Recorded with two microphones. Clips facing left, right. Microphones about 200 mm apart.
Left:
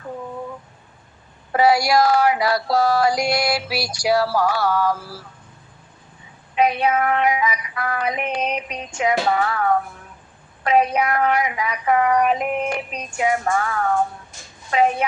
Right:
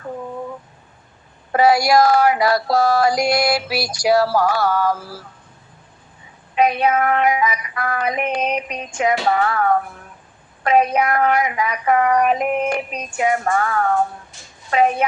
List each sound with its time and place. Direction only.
1.5 s music: 50° right (ahead or behind)
6.6 s music: 45° right (ahead or behind)